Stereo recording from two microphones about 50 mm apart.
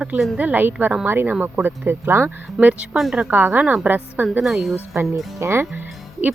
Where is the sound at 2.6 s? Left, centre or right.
Right.